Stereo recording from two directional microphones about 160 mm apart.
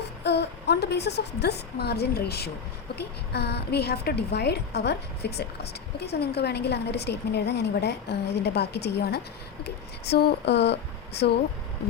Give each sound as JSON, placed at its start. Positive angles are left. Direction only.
{"t": 0.3, "sound": "a woman's voice", "side_deg": 90}